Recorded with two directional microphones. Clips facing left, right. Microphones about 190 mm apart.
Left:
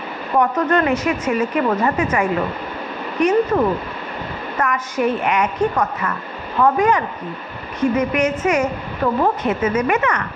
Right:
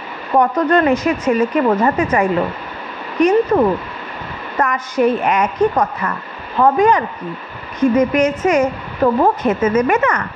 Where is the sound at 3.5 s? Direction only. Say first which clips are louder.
Right 3 dB; 35° right (ahead or behind).